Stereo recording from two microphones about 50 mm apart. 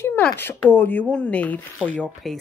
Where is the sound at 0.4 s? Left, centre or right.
Left.